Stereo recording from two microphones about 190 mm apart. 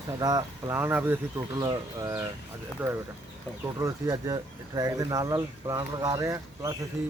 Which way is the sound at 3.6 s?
20° right (ahead or behind).